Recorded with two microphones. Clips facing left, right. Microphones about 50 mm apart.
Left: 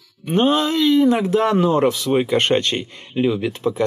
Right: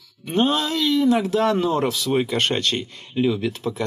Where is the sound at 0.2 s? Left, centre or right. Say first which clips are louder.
Left 4 dB; left.